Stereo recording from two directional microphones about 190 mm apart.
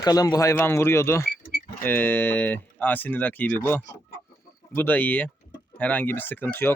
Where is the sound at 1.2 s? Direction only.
50° left (ahead or behind).